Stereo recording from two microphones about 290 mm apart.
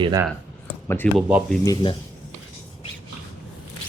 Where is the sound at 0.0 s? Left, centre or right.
Centre.